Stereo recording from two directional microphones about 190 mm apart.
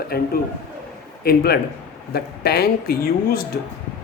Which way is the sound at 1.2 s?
55° left (ahead or behind).